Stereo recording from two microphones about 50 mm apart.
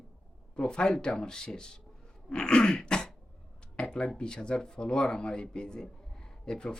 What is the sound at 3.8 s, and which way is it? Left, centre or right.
Speech, centre.